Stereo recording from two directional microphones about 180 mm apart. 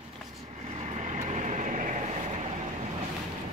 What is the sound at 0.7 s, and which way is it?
Vehicle, 35° right (ahead or behind).